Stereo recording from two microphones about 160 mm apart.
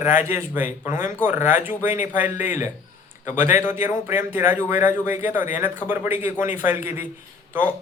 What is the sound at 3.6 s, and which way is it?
Speech, 15° right (ahead or behind).